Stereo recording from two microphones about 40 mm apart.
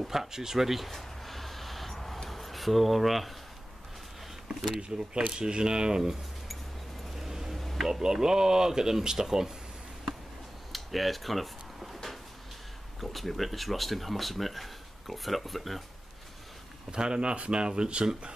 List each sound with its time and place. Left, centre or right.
0.0 s a sound: centre
2.2 s speech: centre
4.7 s speech: right
7.2 s a sound: centre
7.8 s speech: centre
10.7 s drawer open or close: centre
13.0 s speech: centre
16.9 s speech: right